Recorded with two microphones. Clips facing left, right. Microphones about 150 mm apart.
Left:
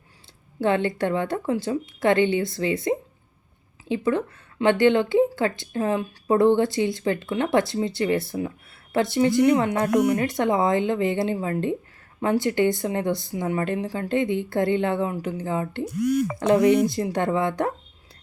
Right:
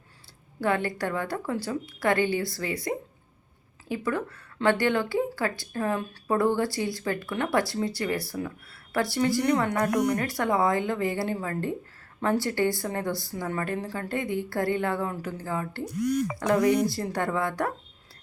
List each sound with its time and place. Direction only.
0.6 s speech: 25° left (ahead or behind)